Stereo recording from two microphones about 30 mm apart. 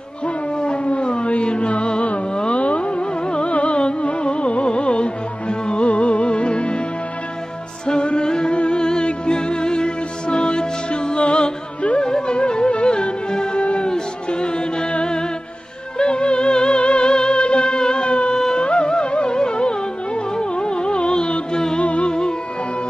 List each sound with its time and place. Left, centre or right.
0.6 s music: left
7.8 s music: left
13.6 s music: left
13.8 s music: left
21.7 s music: left